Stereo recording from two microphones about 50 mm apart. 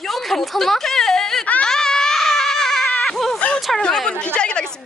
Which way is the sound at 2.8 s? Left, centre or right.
Left.